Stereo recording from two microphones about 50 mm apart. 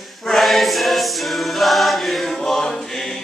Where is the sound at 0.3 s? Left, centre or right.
Centre.